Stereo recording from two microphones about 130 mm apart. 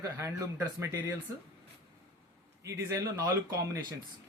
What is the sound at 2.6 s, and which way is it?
Speech, 25° right (ahead or behind).